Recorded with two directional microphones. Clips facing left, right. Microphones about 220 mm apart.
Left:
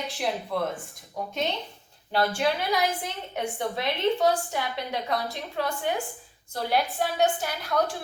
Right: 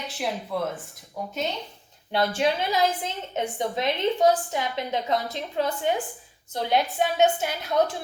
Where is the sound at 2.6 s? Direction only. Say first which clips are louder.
Right 2 dB; 25° right (ahead or behind).